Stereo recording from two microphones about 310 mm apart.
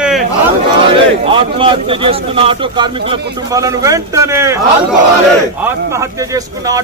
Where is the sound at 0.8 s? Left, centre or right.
Centre.